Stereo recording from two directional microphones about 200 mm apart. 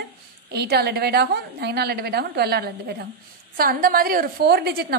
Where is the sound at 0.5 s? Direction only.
55° right (ahead or behind).